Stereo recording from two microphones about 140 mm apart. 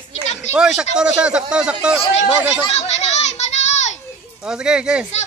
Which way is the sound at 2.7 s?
50° left (ahead or behind).